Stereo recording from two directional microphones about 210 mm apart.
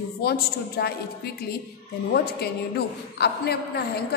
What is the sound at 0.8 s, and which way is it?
Speech, 50° left (ahead or behind).